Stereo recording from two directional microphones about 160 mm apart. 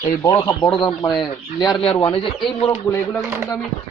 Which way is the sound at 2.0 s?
35° left (ahead or behind).